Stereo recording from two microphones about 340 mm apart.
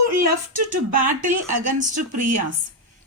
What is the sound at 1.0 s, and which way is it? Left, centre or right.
Speech, right.